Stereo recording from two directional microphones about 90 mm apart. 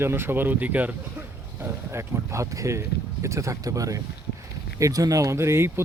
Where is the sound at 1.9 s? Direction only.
35° right (ahead or behind).